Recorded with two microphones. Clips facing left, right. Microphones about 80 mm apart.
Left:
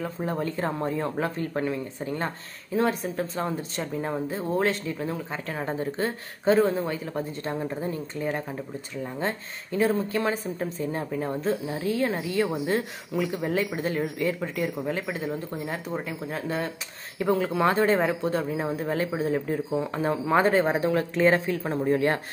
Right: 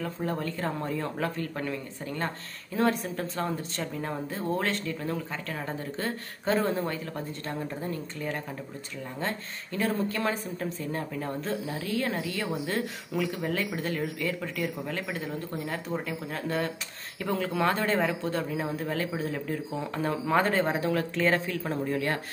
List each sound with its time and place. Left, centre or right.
0.0 s speech: centre
2.7 s speech: centre
5.5 s speech: left
6.5 s speech: centre
6.8 s speech: centre